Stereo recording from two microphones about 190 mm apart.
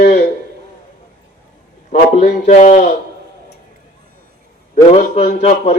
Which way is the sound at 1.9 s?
40° left (ahead or behind).